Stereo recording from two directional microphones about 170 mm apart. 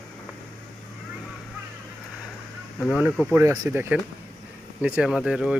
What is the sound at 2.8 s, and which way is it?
Speech, 5° right (ahead or behind).